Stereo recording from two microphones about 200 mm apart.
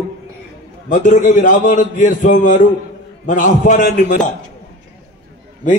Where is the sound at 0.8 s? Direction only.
40° left (ahead or behind).